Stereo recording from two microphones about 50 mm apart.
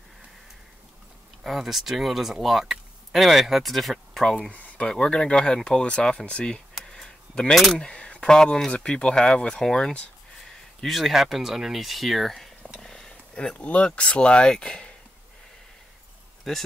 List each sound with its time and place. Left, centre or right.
1.4 s speech: centre
4.5 s speech: left
6.8 s a sound: centre
8.3 s speech: centre
10.8 s speech: centre
12.8 s a sound: centre
13.6 s speech: left
16.5 s speech: centre